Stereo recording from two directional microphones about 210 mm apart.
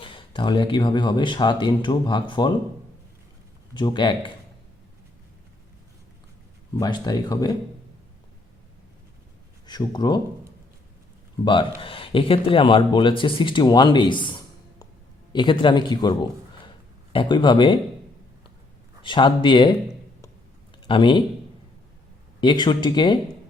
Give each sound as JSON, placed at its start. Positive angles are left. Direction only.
{"t": 0.0, "sound": "speech", "side_deg": 25}
{"t": 3.8, "sound": "speech", "side_deg": 20}
{"t": 6.7, "sound": "speech", "side_deg": 20}
{"t": 9.6, "sound": "speech", "side_deg": 20}
{"t": 11.8, "sound": "speech", "side_deg": 25}
{"t": 19.0, "sound": "speech", "side_deg": 25}
{"t": 20.8, "sound": "a man's voice", "side_deg": 25}
{"t": 22.4, "sound": "speech", "side_deg": 20}